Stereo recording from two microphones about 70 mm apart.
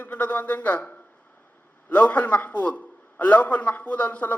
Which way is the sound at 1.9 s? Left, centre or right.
Left.